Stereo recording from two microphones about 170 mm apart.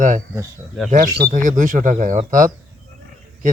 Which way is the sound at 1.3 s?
50° right (ahead or behind).